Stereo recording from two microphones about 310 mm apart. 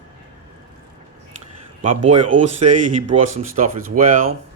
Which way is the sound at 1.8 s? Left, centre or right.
Right.